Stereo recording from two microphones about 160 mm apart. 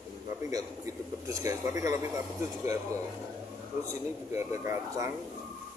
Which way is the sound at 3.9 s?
15° right (ahead or behind).